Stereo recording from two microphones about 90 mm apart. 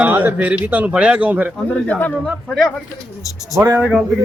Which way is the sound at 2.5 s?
Centre (ahead or behind).